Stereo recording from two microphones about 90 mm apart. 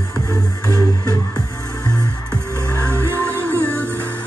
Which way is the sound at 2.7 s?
20° left (ahead or behind).